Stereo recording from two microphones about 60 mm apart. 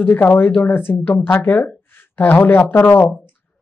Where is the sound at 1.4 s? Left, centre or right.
Left.